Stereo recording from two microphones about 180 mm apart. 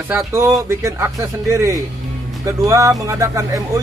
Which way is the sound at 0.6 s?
15° right (ahead or behind).